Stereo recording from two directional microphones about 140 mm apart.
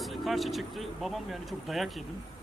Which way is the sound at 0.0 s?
Centre (ahead or behind).